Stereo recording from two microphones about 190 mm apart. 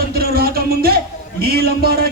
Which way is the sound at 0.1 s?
55° right (ahead or behind).